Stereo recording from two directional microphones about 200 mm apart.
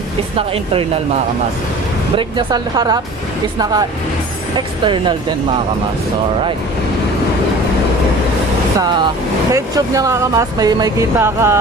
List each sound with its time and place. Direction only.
2.1 s speech: 20° right (ahead or behind)
4.6 s speech: 25° right (ahead or behind)
8.7 s speech: 20° right (ahead or behind)